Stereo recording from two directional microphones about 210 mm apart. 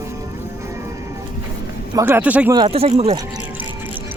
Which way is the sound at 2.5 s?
25° right (ahead or behind).